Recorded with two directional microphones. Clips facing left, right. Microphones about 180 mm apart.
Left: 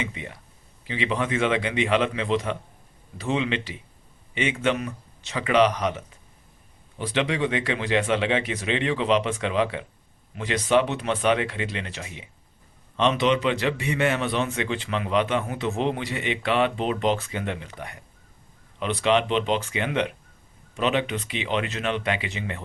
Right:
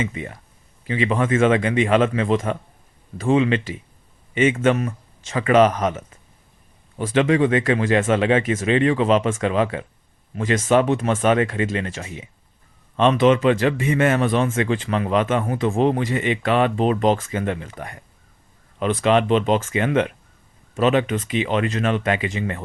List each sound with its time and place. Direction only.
0.0 s a man's voice: 45° right (ahead or behind)